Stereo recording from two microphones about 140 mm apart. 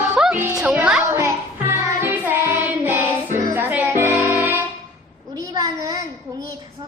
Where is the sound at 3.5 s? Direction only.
15° right (ahead or behind).